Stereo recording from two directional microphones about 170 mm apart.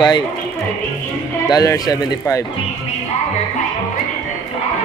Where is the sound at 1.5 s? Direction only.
20° left (ahead or behind).